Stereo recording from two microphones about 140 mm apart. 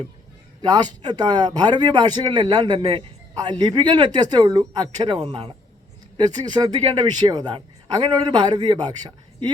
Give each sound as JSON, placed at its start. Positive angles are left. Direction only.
{"t": 0.6, "sound": "a man's voice", "side_deg": -30}
{"t": 3.3, "sound": "a man's voice", "side_deg": -30}
{"t": 5.1, "sound": "speech", "side_deg": -45}
{"t": 6.1, "sound": "a man's voice", "side_deg": -30}